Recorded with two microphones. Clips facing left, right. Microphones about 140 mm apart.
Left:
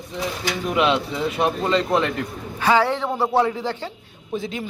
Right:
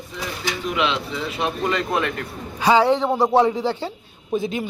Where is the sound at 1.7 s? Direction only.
25° left (ahead or behind).